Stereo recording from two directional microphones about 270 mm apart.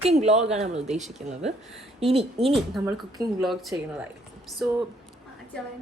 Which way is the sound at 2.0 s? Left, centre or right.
Right.